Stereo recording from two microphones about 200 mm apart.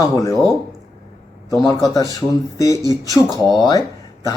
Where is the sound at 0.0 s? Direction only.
15° left (ahead or behind).